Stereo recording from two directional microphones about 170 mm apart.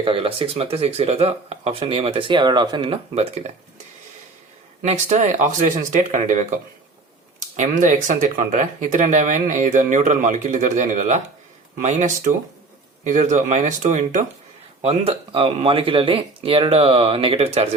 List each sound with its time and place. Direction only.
0.0 s speech: 30° right (ahead or behind)
4.8 s speech: 45° right (ahead or behind)
14.8 s speech: 35° right (ahead or behind)